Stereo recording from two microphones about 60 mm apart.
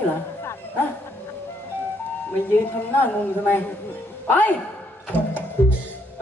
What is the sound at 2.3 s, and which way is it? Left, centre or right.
Speech, left.